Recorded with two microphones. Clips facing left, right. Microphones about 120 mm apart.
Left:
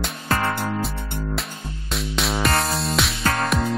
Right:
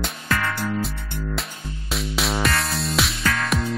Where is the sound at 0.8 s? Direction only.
Centre (ahead or behind).